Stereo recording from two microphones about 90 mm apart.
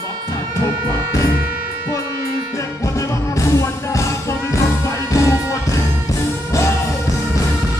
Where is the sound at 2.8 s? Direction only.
35° left (ahead or behind).